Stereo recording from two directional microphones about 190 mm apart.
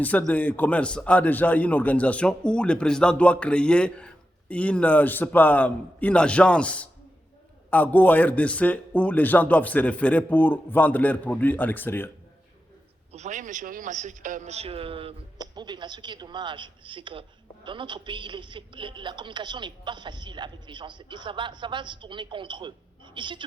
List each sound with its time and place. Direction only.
0.0 s a man's voice: 5° left (ahead or behind)
13.1 s a man's voice: 40° right (ahead or behind)